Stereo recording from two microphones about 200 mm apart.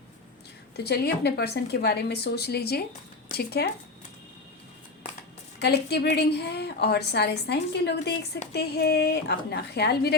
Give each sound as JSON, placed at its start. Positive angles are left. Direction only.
{"t": 0.9, "sound": "a woman's voice", "side_deg": 55}
{"t": 5.5, "sound": "a woman's voice", "side_deg": 55}